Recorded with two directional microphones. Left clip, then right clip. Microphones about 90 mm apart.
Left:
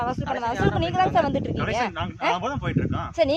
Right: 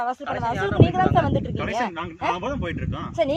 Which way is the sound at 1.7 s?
45° left (ahead or behind).